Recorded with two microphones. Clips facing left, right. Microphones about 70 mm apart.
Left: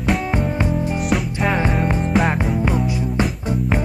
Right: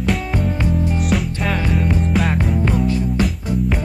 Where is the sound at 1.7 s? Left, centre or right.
Left.